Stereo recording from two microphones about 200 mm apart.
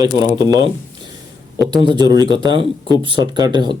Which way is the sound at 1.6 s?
25° right (ahead or behind).